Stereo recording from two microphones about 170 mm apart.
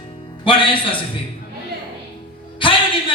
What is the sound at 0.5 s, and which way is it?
Music, 30° left (ahead or behind).